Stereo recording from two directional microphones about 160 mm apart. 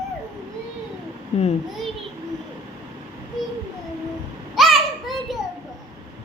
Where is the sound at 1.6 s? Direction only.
Centre (ahead or behind).